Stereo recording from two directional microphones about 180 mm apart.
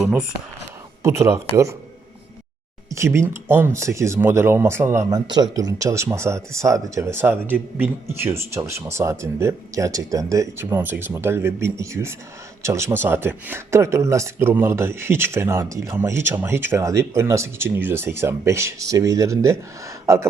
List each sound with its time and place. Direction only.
1.0 s speech: 15° right (ahead or behind)
2.9 s speech: 15° right (ahead or behind)